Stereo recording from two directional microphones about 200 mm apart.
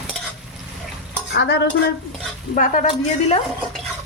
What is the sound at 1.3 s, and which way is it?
Stir, 55° left (ahead or behind).